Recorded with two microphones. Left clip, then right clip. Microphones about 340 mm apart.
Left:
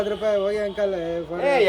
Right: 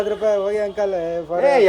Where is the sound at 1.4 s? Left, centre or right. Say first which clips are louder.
Right 5 dB; right.